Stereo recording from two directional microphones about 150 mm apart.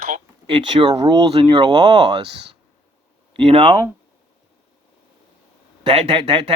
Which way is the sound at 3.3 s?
35° right (ahead or behind).